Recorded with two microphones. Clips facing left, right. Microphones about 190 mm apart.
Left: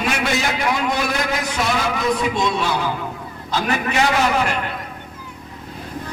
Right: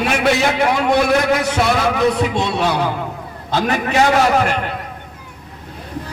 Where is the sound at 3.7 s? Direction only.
40° right (ahead or behind).